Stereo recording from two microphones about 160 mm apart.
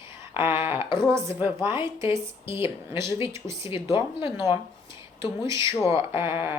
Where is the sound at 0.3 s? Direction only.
15° right (ahead or behind).